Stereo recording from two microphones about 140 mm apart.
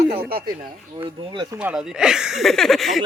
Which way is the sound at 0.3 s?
90° right.